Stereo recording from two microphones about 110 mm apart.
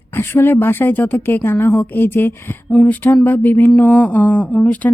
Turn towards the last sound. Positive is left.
turn(degrees=15)  # may be behind; listen again after turning